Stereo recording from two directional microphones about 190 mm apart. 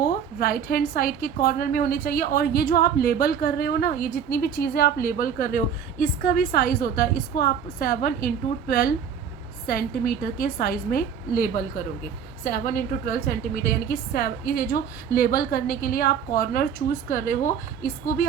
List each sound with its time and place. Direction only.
0.0 s a woman's voice: 50° left (ahead or behind)